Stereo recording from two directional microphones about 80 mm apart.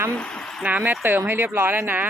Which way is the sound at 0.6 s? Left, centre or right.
Centre.